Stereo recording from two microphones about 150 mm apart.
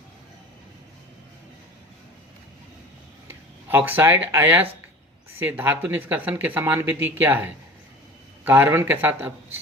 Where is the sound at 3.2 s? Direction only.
15° right (ahead or behind).